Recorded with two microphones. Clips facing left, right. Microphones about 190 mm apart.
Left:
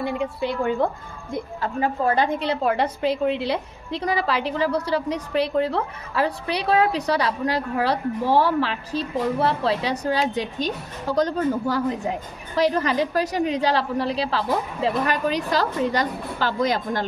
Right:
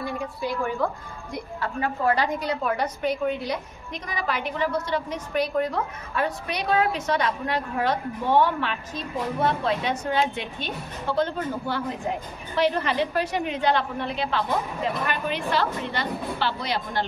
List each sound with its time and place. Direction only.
0.4 s a woman's voice: 25° left (ahead or behind)
2.1 s a woman's voice: 25° left (ahead or behind); by 17.0 s 45° left (ahead or behind)